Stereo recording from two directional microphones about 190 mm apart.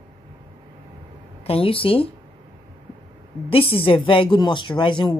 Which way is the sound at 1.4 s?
30° left (ahead or behind).